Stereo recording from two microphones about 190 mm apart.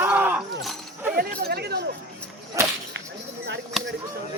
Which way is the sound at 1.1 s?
55° right (ahead or behind).